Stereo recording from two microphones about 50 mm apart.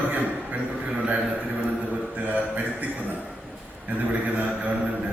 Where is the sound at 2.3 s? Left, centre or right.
Right.